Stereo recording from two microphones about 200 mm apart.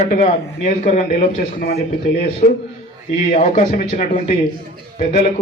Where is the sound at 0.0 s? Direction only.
35° left (ahead or behind).